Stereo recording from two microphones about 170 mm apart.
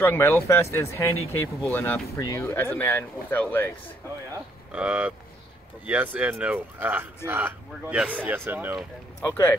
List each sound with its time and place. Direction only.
0.0 s speech: 15° left (ahead or behind)
4.7 s speech: 10° right (ahead or behind)
9.2 s speech: 10° left (ahead or behind)